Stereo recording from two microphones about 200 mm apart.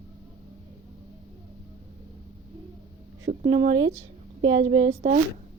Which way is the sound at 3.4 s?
25° right (ahead or behind).